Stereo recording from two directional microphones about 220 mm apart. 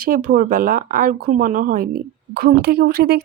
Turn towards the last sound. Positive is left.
turn(degrees=-45)  # may be behind; listen again after turning